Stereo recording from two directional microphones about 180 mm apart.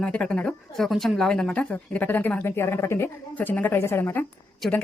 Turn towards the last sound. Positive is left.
turn(degrees=0)  # may be behind; listen again after turning